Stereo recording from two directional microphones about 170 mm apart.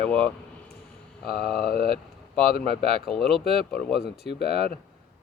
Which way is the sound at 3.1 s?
Centre (ahead or behind).